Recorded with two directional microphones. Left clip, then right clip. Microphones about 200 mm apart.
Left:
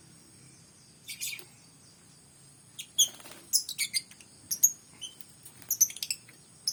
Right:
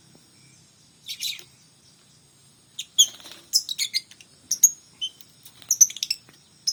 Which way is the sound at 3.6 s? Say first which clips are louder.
Right 6 dB; 40° left (ahead or behind).